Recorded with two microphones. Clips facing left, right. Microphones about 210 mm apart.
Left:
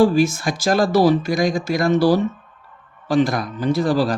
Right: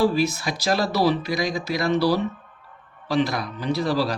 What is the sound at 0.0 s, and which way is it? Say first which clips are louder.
Speech: left 5 dB; 45° left (ahead or behind).